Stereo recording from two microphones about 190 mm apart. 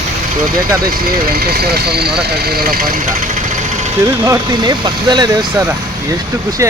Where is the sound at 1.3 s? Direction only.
55° right (ahead or behind).